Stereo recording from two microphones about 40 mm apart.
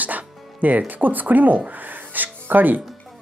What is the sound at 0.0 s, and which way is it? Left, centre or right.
Speech, right.